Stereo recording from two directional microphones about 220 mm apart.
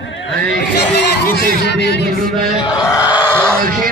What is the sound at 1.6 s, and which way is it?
Speech, 50° left (ahead or behind).